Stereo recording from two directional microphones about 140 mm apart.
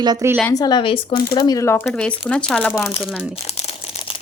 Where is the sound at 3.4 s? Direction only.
45° left (ahead or behind).